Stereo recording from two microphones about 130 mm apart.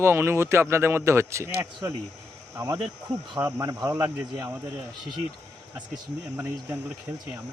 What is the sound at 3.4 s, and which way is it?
Speech, 25° right (ahead or behind).